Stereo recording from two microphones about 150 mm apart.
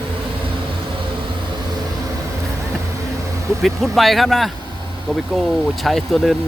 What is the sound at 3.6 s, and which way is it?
Speech, centre (ahead or behind).